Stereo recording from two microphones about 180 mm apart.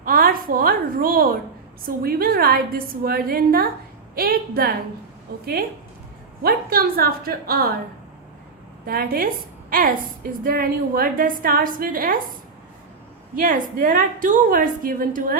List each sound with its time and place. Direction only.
0.0 s a sound: 50° right (ahead or behind)
2.0 s a woman's voice: 55° right (ahead or behind)
6.4 s a woman's voice: 55° right (ahead or behind)
8.9 s a woman's voice: 55° right (ahead or behind)
13.3 s a woman's voice: 50° right (ahead or behind)